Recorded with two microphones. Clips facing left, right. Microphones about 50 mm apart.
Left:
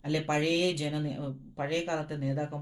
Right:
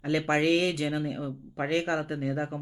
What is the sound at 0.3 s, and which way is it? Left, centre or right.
Speech, right.